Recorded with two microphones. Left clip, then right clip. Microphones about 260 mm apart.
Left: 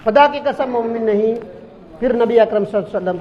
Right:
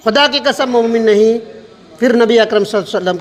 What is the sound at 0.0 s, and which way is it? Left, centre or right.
A man's voice, right.